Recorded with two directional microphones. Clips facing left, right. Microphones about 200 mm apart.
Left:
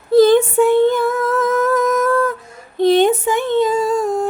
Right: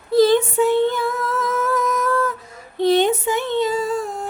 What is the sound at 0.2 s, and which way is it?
Female singing, 50° left (ahead or behind).